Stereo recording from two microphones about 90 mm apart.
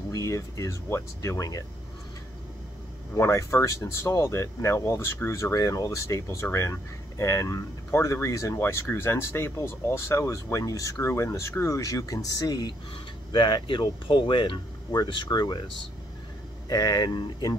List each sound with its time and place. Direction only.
0.1 s speech: 35° left (ahead or behind)
3.2 s speech: 35° left (ahead or behind)
13.3 s speech: 60° left (ahead or behind)
15.0 s speech: 55° left (ahead or behind)
16.6 s speech: 45° left (ahead or behind)